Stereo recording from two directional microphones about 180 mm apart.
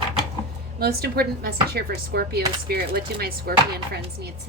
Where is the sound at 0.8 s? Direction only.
60° right (ahead or behind).